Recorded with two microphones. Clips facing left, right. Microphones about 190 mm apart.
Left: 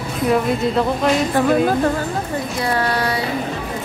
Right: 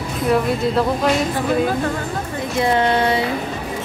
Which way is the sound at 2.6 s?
20° right (ahead or behind).